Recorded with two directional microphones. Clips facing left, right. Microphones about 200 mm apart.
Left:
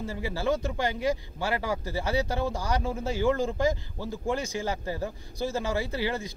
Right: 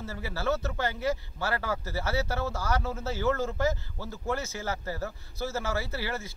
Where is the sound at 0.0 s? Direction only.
15° left (ahead or behind).